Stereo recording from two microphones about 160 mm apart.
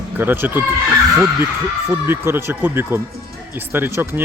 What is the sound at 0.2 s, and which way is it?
Speech, 15° right (ahead or behind).